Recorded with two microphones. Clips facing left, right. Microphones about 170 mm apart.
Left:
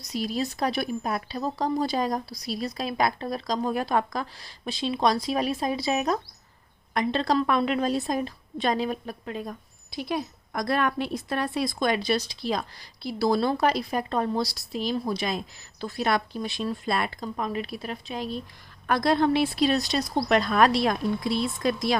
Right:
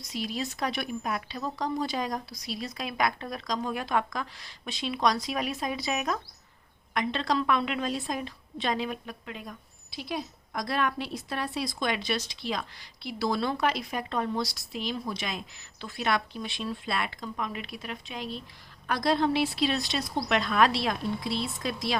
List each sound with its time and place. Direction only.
0.0 s a woman's voice: 40° left (ahead or behind)
18.9 s a woman's voice: 55° left (ahead or behind)